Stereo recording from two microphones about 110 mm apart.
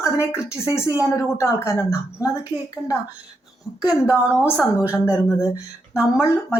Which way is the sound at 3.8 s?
15° right (ahead or behind).